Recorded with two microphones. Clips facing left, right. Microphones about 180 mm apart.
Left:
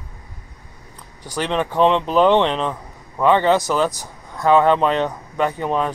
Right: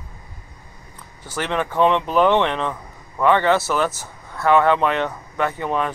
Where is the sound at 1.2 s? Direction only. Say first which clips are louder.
Left 2 dB; 15° left (ahead or behind).